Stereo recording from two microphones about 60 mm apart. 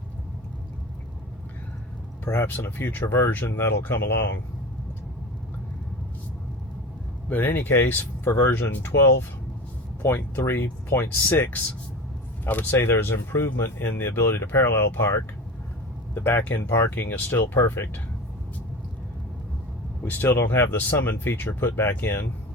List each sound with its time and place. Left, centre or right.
2.2 s speech: left
7.3 s speech: left
12.7 s speech: left
13.0 s speech: left
16.1 s speech: left
20.1 s speech: left
20.3 s speech: left